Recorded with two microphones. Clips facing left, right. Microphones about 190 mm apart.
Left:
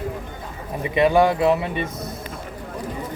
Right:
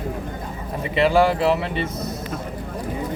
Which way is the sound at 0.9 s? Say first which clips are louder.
Left 1 dB; 15° left (ahead or behind).